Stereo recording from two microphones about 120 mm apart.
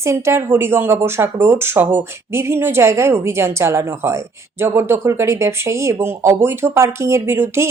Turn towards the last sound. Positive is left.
turn(degrees=-20)  # may be behind; listen again after turning